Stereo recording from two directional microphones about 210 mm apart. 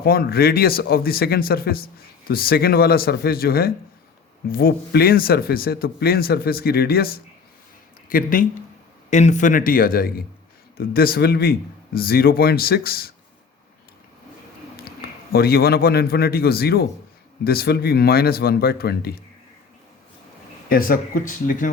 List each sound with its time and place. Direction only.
0.0 s a man's voice: 45° left (ahead or behind)
15.3 s a man's voice: 45° left (ahead or behind)
20.7 s a man's voice: 45° left (ahead or behind)